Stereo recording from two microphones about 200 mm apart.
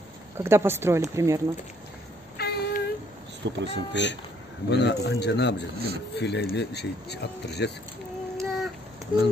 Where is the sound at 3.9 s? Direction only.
60° left (ahead or behind).